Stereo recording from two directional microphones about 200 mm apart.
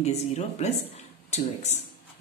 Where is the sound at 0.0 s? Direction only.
35° left (ahead or behind).